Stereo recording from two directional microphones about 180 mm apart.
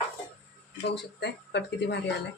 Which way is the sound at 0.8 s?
70° left (ahead or behind).